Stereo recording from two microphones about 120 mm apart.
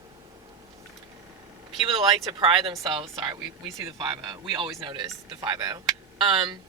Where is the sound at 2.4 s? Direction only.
45° right (ahead or behind).